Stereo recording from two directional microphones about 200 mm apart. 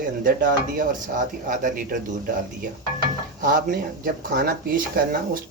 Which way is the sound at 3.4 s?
40° right (ahead or behind).